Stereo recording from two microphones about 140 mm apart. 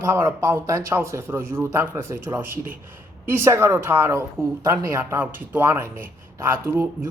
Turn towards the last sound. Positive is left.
turn(degrees=-15)  # may be behind; listen again after turning